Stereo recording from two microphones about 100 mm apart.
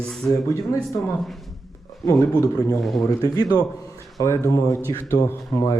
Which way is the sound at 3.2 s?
40° left (ahead or behind).